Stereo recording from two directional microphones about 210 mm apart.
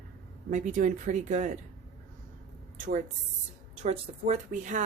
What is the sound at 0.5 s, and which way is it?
Speech, 35° right (ahead or behind).